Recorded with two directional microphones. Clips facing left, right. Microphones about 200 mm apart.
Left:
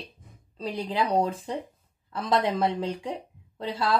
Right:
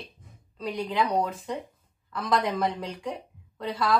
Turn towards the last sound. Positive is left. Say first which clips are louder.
# right 1 dB
turn(degrees=25)  # may be behind; listen again after turning